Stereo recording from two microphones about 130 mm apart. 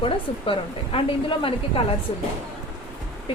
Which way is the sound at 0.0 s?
45° left (ahead or behind).